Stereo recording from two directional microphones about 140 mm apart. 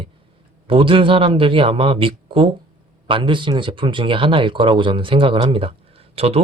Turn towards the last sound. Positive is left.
turn(degrees=-45)  # may be behind; listen again after turning